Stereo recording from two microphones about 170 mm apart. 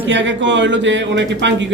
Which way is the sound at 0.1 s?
90° right.